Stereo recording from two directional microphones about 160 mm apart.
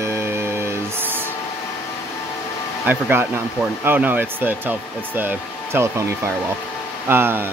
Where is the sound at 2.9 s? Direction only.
15° right (ahead or behind).